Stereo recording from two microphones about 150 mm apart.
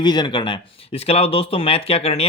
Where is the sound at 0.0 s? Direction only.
30° left (ahead or behind).